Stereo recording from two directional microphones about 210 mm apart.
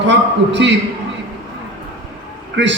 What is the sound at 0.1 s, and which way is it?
Speech, 55° right (ahead or behind).